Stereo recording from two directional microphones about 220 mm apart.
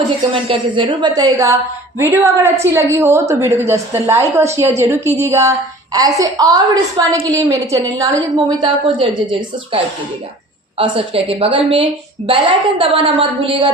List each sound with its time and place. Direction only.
0.4 s a woman's voice: 25° right (ahead or behind)